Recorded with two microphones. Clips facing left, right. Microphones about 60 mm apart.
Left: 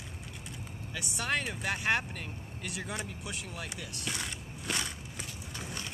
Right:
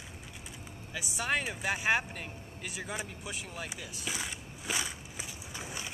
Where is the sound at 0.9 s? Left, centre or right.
Centre.